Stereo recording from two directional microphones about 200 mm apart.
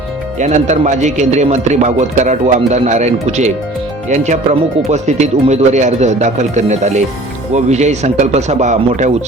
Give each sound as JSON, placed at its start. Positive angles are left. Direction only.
{"t": 0.3, "sound": "speech", "side_deg": -35}